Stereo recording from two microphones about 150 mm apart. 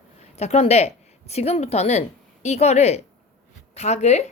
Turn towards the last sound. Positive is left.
turn(degrees=50)  # may be behind; listen again after turning